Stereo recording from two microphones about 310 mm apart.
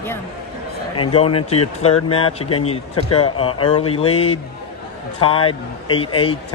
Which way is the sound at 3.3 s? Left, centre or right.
Centre.